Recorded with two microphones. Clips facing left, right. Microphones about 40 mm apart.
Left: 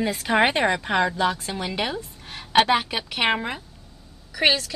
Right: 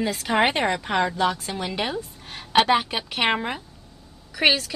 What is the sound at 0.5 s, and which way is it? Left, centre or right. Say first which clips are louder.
Speech: left 1 dB; centre.